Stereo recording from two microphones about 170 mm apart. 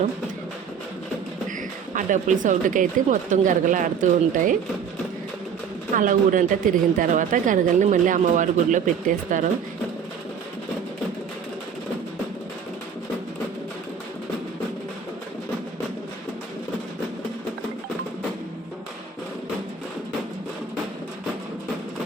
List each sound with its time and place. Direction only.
2.0 s a woman's voice: 50° right (ahead or behind)
5.9 s a woman's voice: 50° right (ahead or behind)